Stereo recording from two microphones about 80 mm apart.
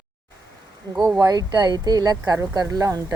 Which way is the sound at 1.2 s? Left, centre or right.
Right.